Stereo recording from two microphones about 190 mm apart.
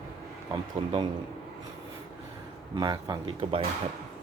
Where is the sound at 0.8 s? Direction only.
30° right (ahead or behind).